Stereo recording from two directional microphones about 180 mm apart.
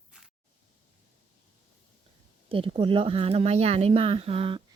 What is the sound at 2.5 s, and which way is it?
Speech, 30° right (ahead or behind).